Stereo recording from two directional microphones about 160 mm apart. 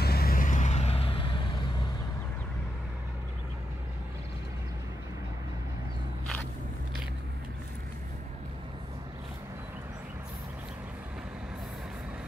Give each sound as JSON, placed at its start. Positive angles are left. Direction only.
{"t": 0.0, "sound": "vehicle", "side_deg": 75}